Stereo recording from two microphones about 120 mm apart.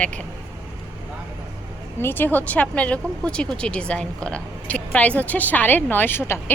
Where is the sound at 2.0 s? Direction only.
15° left (ahead or behind).